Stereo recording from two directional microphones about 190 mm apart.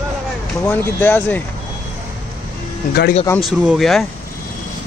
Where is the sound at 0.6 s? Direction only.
10° left (ahead or behind).